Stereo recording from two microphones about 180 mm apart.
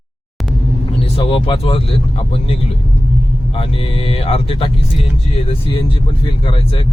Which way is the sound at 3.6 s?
30° left (ahead or behind).